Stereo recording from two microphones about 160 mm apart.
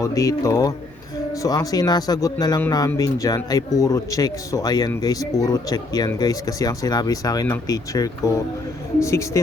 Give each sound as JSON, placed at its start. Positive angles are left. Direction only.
{"t": 0.0, "sound": "a man's voice", "side_deg": 20}